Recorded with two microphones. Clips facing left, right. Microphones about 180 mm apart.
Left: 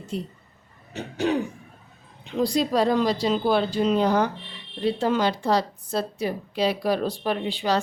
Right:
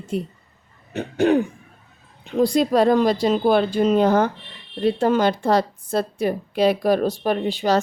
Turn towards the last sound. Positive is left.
turn(degrees=-45)  # may be behind; listen again after turning